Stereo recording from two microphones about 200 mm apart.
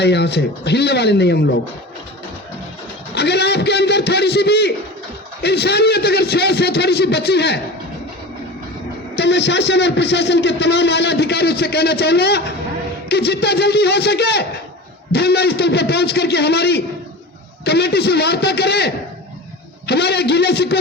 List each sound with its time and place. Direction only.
0.0 s a man's voice: 55° left (ahead or behind)
3.2 s a man's voice: 55° left (ahead or behind)
9.1 s a man's voice: 60° left (ahead or behind)